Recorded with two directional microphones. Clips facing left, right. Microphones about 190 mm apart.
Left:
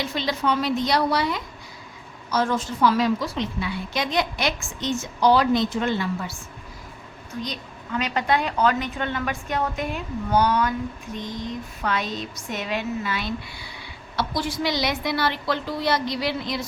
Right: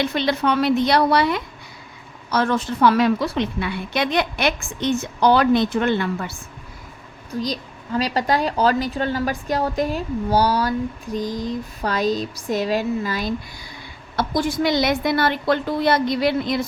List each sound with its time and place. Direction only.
0.0 s a woman's voice: 65° right (ahead or behind)
7.4 s a woman's voice: 35° right (ahead or behind); by 16.6 s 55° right (ahead or behind)